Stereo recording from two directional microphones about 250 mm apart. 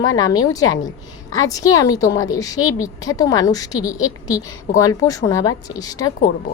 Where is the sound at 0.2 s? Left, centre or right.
Centre.